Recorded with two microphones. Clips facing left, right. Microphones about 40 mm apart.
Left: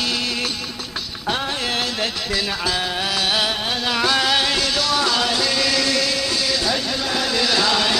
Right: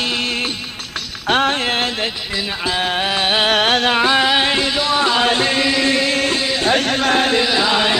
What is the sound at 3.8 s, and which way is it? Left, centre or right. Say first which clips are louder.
Music: right 4 dB; right.